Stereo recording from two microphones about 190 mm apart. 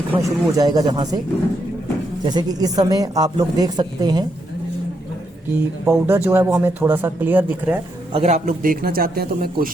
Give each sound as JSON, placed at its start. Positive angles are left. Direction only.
{"t": 0.1, "sound": "speech", "side_deg": -15}
{"t": 2.2, "sound": "speech", "side_deg": -20}
{"t": 5.5, "sound": "speech", "side_deg": -15}
{"t": 8.1, "sound": "a man's voice", "side_deg": -35}